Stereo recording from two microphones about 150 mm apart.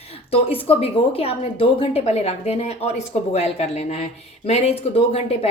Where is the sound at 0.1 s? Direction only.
40° left (ahead or behind).